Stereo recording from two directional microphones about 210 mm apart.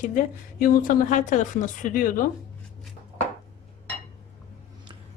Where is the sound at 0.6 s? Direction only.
40° left (ahead or behind).